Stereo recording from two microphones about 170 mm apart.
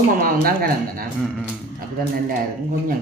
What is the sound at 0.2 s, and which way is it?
Speech, 60° right (ahead or behind).